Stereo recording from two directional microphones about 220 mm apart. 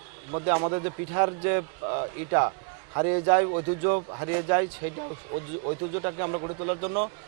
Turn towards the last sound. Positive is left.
turn(degrees=-30)  # may be behind; listen again after turning